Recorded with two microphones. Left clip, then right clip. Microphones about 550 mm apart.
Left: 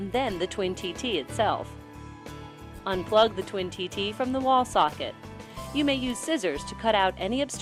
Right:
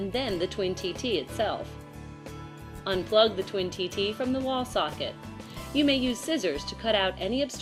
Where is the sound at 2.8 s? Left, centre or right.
Left.